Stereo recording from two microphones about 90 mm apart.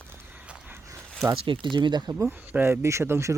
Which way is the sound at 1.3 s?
70° right (ahead or behind).